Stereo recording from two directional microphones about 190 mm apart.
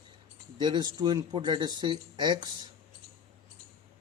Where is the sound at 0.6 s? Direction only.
25° right (ahead or behind).